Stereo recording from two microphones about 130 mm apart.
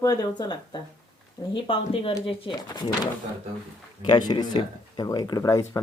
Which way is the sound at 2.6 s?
30° left (ahead or behind).